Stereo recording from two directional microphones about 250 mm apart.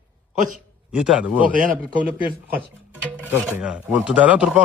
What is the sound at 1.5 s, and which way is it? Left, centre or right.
Speech, right.